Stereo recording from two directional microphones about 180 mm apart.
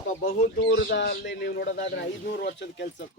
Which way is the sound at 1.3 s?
80° left.